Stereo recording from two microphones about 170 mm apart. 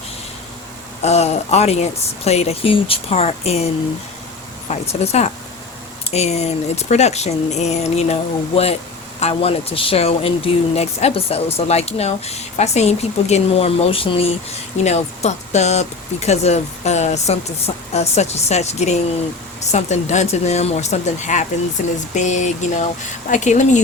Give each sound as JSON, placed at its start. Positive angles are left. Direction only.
{"t": 1.0, "sound": "speech", "side_deg": 40}
{"t": 4.7, "sound": "speech", "side_deg": 40}